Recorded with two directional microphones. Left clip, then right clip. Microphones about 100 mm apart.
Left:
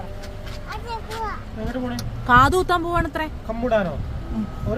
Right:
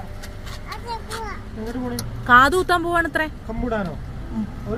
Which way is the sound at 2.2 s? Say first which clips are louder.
Right 2 dB; 15° right (ahead or behind).